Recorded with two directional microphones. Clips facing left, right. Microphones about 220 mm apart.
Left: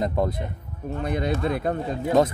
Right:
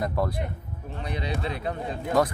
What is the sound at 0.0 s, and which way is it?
Speech, 20° left (ahead or behind).